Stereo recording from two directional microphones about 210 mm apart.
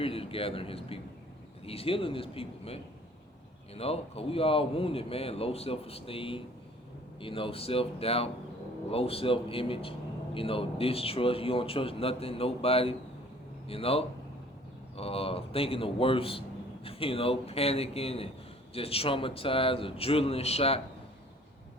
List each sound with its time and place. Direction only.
0.0 s a man's voice: 25° left (ahead or behind)